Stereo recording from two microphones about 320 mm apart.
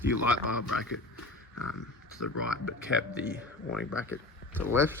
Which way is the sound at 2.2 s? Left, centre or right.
Left.